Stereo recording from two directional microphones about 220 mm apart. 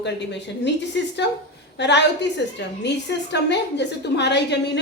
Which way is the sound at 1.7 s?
50° left (ahead or behind).